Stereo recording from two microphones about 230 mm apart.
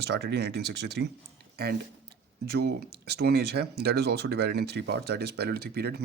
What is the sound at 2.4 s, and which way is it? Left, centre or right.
Speech, right.